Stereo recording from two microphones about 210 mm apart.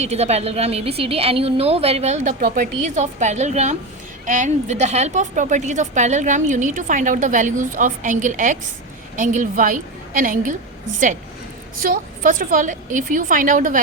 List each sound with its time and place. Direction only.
0.0 s a woman's voice: 30° right (ahead or behind)
11.8 s a woman's voice: 40° right (ahead or behind)